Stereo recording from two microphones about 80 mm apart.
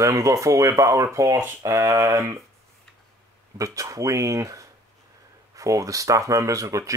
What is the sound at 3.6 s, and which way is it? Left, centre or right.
Speech, right.